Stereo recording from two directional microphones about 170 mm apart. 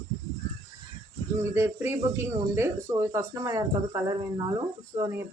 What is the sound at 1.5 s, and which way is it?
Speech, 15° right (ahead or behind).